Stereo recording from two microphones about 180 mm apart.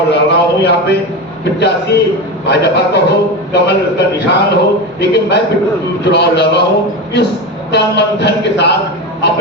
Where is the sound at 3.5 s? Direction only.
70° left (ahead or behind).